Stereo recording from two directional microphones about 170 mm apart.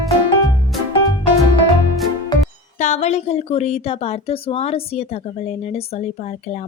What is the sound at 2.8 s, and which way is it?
A woman's voice, 45° left (ahead or behind).